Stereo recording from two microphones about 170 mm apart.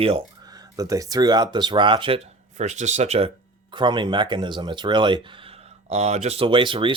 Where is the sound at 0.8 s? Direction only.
20° right (ahead or behind).